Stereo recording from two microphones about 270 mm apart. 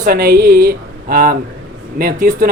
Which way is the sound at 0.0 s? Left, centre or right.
Right.